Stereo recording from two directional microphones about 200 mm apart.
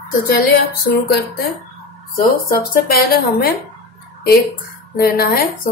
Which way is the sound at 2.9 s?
50° left (ahead or behind).